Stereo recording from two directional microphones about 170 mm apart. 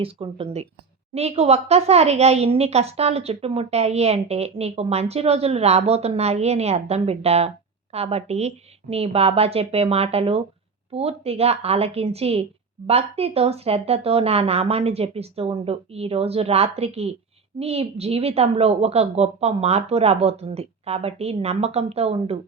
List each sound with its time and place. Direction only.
0.0 s a woman's voice: 35° right (ahead or behind)